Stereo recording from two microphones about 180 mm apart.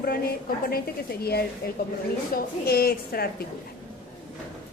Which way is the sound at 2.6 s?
60° left (ahead or behind).